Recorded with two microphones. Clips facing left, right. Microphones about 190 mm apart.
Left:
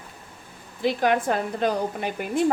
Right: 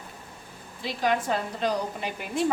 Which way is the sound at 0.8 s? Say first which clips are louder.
Left 5 dB; 55° left (ahead or behind).